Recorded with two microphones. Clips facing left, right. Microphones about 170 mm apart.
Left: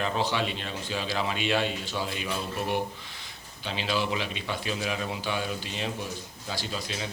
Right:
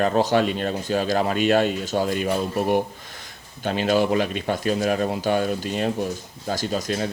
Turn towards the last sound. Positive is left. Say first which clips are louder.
# right 9 dB
turn(degrees=-45)  # may be behind; listen again after turning